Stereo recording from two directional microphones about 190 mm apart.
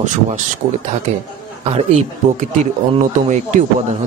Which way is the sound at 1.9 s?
40° right (ahead or behind).